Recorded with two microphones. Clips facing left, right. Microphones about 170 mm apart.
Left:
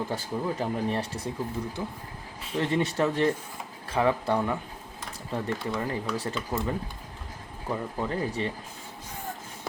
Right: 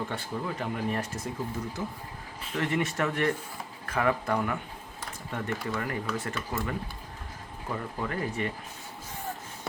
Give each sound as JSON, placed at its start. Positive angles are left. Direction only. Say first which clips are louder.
{"t": 0.1, "sound": "speech", "louder": "left 3 dB", "side_deg": 30}